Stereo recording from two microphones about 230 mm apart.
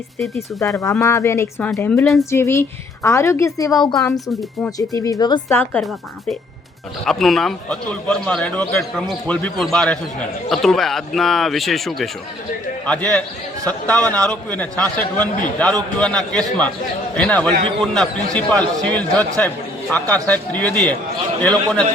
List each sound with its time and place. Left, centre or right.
0.3 s a woman's voice: centre
4.1 s speech: centre
4.8 s a woman's voice: centre